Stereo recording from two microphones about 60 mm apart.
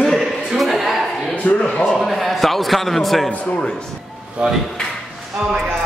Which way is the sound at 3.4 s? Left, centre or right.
Left.